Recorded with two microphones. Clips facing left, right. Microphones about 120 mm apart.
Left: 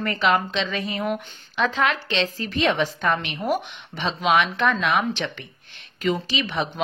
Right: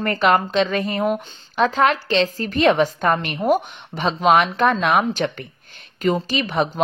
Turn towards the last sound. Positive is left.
turn(degrees=-45)  # may be behind; listen again after turning